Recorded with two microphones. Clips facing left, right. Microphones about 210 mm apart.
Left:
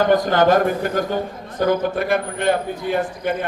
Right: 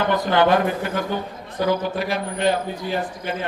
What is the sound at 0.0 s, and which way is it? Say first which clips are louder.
A man's voice: left 3 dB; 45° left (ahead or behind).